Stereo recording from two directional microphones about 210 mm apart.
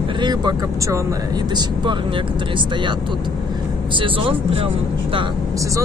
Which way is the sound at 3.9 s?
25° right (ahead or behind).